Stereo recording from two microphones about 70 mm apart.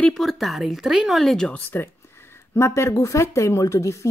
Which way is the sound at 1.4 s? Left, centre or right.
Left.